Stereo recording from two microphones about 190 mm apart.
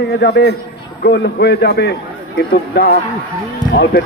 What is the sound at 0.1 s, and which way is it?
A man's voice, 60° left (ahead or behind).